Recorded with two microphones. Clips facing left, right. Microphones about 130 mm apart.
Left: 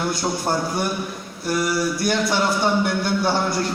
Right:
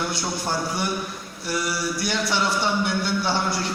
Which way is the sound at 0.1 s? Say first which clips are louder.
Left 4 dB; 50° left (ahead or behind).